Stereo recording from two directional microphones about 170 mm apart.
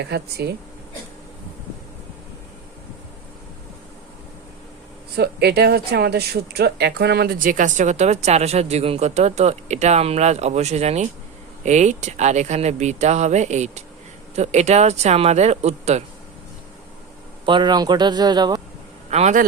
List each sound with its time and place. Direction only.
0.0 s speech: 70° right (ahead or behind)
5.1 s speech: 70° right (ahead or behind); by 16.0 s 40° right (ahead or behind)
17.4 s a man's voice: 25° right (ahead or behind)
19.1 s speech: 40° right (ahead or behind)